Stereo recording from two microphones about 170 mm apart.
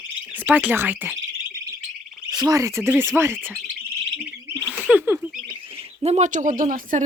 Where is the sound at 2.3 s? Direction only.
20° right (ahead or behind).